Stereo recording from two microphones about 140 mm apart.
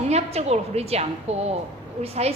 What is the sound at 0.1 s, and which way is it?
A woman's voice, 50° right (ahead or behind).